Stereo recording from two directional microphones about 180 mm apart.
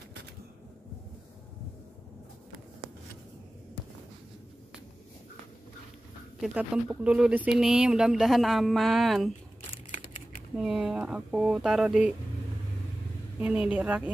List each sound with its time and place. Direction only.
6.4 s speech: 5° right (ahead or behind)
9.6 s crumpling: 30° left (ahead or behind)
10.6 s speech: 5° right (ahead or behind)
13.4 s a woman's voice: 5° right (ahead or behind)